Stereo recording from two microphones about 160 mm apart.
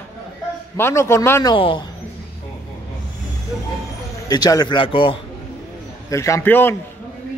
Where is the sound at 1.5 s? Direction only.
30° left (ahead or behind).